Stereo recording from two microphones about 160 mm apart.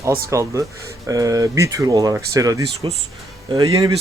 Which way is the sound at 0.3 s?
20° right (ahead or behind).